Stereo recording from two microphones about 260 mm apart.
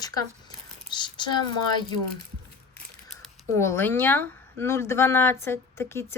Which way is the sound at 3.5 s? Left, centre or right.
Centre.